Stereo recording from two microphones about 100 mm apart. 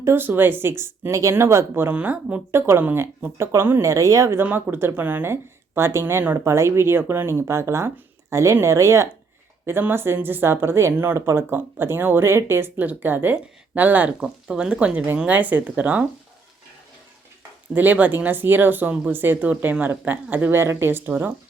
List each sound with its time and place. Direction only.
0.0 s speech: 20° right (ahead or behind)
17.7 s speech: 15° right (ahead or behind)